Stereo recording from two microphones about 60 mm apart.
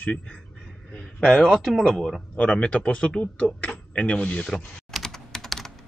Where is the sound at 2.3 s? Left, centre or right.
Centre.